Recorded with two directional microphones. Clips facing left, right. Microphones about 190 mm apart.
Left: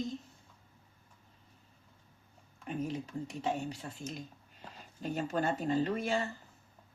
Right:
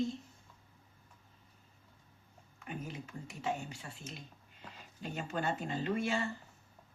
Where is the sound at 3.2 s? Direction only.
35° left (ahead or behind).